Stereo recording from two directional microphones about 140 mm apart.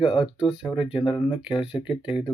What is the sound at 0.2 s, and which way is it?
Speech, 5° right (ahead or behind).